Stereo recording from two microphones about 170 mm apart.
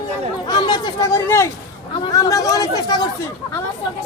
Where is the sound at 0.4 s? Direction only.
25° left (ahead or behind).